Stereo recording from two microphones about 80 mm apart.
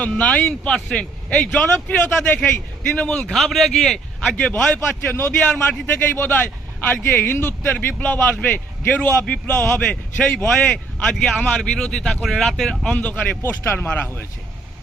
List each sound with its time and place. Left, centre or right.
0.2 s speech: centre
4.2 s speech: centre
5.1 s a man's voice: left; by 12.7 s centre
12.8 s speech: centre
13.4 s a man's voice: left
13.7 s speech: centre